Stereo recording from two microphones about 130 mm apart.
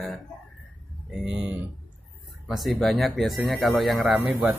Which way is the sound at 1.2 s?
5° right (ahead or behind).